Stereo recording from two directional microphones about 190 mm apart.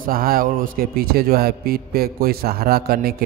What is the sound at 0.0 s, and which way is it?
A man's voice, 50° right (ahead or behind).